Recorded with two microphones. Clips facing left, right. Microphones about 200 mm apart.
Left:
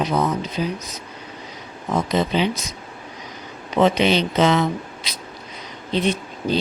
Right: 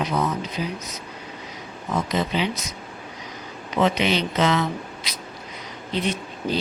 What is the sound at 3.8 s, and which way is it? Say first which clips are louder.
Speech: left 4 dB; 25° left (ahead or behind).